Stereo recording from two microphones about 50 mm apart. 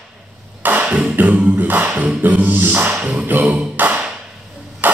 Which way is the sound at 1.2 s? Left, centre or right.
Right.